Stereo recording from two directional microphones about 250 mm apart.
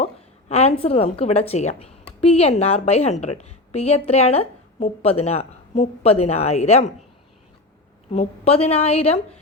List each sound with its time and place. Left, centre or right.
0.0 s a woman's voice: left
8.1 s a woman's voice: left